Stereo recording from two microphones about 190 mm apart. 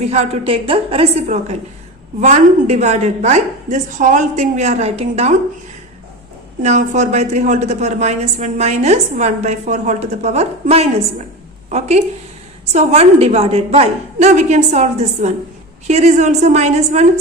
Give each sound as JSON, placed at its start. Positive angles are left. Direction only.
{"t": 0.0, "sound": "a woman's voice", "side_deg": -35}
{"t": 6.6, "sound": "a woman's voice", "side_deg": -35}